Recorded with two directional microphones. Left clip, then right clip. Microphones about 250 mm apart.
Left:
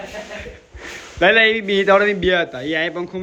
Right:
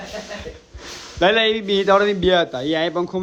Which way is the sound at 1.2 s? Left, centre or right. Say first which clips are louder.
Left 3 dB; centre.